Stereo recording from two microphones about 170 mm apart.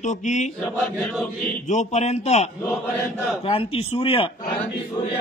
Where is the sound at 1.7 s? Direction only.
45° left (ahead or behind).